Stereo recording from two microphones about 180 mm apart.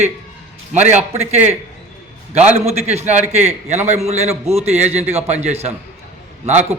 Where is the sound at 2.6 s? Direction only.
35° right (ahead or behind).